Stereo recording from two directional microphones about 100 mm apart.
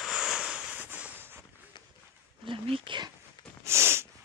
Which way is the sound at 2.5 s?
60° right (ahead or behind).